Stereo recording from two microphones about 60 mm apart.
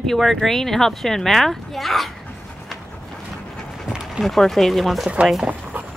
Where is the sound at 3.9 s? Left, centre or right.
Centre.